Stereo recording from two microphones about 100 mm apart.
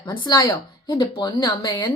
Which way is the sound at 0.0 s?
40° left (ahead or behind).